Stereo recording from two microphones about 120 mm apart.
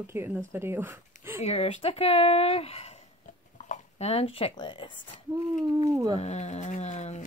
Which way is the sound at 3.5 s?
70° left (ahead or behind).